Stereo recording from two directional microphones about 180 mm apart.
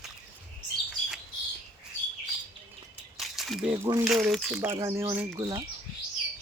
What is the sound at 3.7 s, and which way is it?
Speech, 15° right (ahead or behind).